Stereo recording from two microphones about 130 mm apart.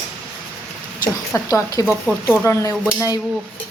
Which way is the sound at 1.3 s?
25° left (ahead or behind).